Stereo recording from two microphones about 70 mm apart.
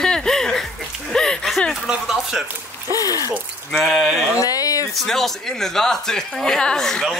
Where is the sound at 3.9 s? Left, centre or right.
Centre.